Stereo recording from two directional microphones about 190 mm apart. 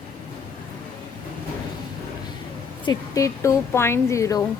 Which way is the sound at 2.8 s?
15° left (ahead or behind).